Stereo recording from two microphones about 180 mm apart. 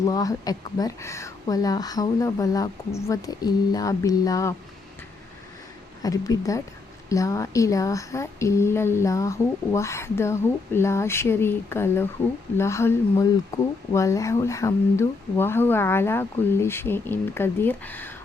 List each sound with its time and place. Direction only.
0.0 s speech: 20° left (ahead or behind)
6.0 s speech: 20° left (ahead or behind)